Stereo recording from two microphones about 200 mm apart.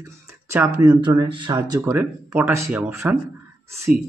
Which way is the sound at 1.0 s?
20° right (ahead or behind).